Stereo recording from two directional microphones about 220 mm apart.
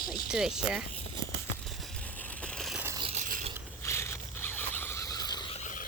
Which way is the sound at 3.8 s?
10° left (ahead or behind).